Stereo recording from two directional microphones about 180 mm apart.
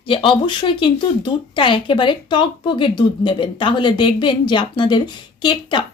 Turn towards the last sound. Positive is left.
turn(degrees=25)  # may be behind; listen again after turning